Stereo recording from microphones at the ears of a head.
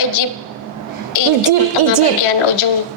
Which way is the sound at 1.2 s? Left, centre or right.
Right.